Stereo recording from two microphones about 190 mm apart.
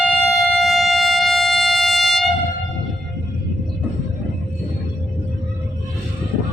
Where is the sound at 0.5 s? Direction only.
Centre (ahead or behind).